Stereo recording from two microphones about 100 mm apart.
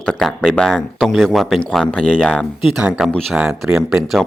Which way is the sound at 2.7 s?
10° right (ahead or behind).